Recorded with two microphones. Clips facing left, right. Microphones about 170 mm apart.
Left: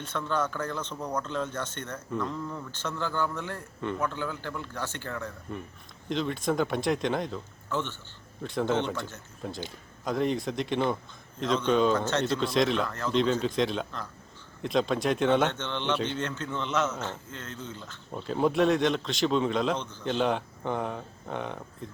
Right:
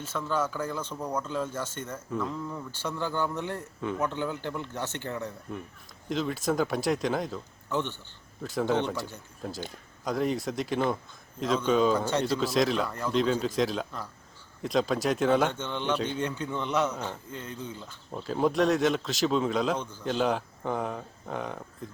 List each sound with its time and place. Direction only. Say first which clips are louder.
0.0 s speech: even; 5° right (ahead or behind)
3.8 s a man's voice: left 1 dB; 5° right (ahead or behind)
4.0 s a man's voice: right 2 dB; 20° right (ahead or behind)
6.1 s a man's voice: even; centre (ahead or behind)
7.7 s speech: right 1 dB; 15° right (ahead or behind)
8.4 s a man's voice: even; centre (ahead or behind)
12.9 s speech: even; 10° right (ahead or behind)
13.1 s a man's voice: even; centre (ahead or behind)
18.1 s a man's voice: even; centre (ahead or behind)